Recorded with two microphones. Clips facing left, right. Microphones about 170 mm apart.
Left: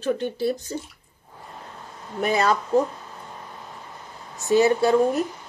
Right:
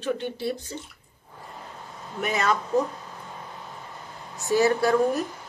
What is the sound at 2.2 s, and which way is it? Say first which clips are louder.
Speech: left 4 dB; 35° left (ahead or behind).